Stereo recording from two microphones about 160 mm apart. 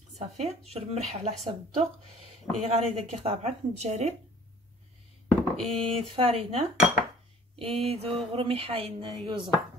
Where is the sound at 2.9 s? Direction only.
40° right (ahead or behind).